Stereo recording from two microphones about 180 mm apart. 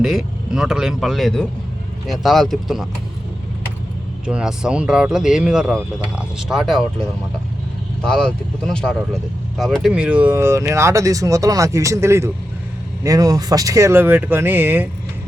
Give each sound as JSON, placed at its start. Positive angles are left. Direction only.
{"t": 0.0, "sound": "speech", "side_deg": 0}
{"t": 4.3, "sound": "speech", "side_deg": -5}
{"t": 8.0, "sound": "speech", "side_deg": 5}